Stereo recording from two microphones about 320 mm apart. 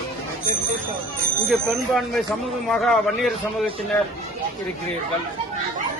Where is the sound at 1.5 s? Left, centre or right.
Centre.